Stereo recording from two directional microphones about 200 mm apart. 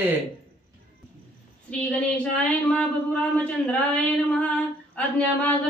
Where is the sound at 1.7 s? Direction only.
5° left (ahead or behind).